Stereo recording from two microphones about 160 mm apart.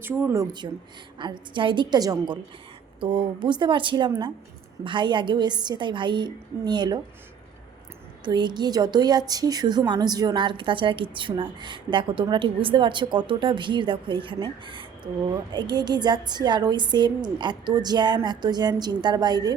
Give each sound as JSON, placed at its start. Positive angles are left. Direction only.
{"t": 0.0, "sound": "speech", "side_deg": -15}
{"t": 0.6, "sound": "speech", "side_deg": -25}
{"t": 8.2, "sound": "speech", "side_deg": -25}